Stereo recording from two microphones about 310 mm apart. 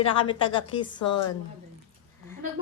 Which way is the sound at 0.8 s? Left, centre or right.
Left.